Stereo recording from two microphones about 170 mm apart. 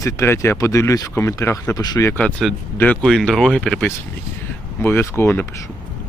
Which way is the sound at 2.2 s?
5° left (ahead or behind).